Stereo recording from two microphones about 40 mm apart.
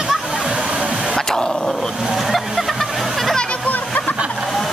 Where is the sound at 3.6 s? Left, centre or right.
Left.